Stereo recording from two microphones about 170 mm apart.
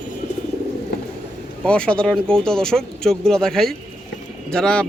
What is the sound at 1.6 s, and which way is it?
A man's voice, 5° left (ahead or behind).